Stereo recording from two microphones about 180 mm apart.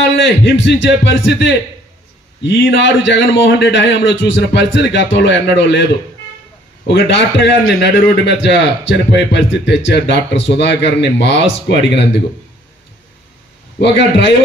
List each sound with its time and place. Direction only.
0.2 s a man's voice: 90° left
6.9 s a man's voice: 80° left
13.7 s a man's voice: 80° left